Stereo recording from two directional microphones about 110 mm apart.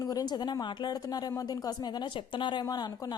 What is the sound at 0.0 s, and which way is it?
A woman's voice, 35° left (ahead or behind).